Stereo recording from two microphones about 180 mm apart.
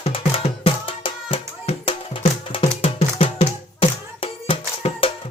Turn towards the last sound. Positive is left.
turn(degrees=30)  # may be behind; listen again after turning